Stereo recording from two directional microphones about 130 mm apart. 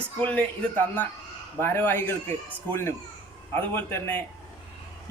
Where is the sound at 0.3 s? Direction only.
10° left (ahead or behind).